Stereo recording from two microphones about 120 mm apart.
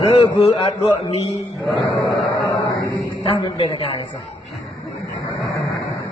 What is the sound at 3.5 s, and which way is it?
Speech, 30° left (ahead or behind).